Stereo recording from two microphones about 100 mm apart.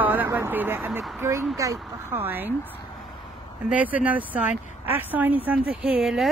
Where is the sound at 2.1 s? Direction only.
20° right (ahead or behind).